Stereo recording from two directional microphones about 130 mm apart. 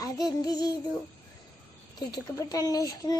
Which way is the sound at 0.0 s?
30° left (ahead or behind).